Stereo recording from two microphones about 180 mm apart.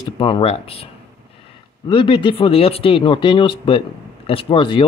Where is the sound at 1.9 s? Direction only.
25° left (ahead or behind).